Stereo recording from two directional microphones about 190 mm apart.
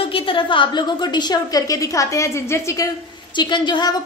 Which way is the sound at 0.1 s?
25° left (ahead or behind).